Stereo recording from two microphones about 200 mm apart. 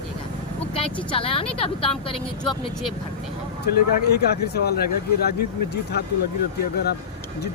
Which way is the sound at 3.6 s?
55° left (ahead or behind).